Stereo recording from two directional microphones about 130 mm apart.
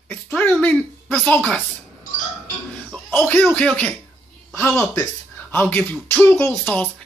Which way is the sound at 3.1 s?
15° left (ahead or behind).